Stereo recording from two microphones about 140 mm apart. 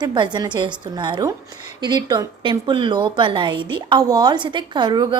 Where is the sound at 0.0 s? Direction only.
35° right (ahead or behind).